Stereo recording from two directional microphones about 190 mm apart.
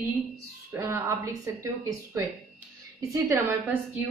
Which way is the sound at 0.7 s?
15° right (ahead or behind).